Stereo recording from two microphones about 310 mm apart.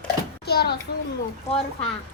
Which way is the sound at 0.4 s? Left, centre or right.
Left.